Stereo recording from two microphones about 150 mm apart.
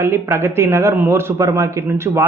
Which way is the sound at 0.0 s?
15° right (ahead or behind).